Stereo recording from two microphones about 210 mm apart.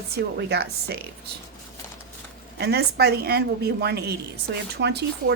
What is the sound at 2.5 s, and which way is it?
A woman's voice, 50° right (ahead or behind).